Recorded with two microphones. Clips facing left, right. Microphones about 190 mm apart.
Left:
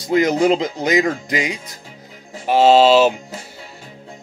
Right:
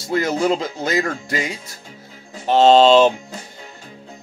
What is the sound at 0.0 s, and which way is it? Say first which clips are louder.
Speech: left 4 dB; 20° left (ahead or behind).